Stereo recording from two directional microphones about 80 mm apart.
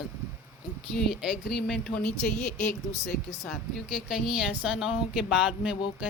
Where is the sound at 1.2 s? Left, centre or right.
Centre.